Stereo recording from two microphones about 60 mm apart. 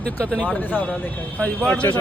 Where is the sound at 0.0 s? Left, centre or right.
Centre.